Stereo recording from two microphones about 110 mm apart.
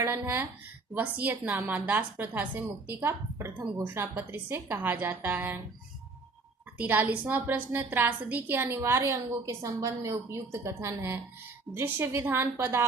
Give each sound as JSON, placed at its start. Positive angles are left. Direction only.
{"t": 0.0, "sound": "a woman's voice", "side_deg": -20}
{"t": 6.7, "sound": "a woman's voice", "side_deg": -15}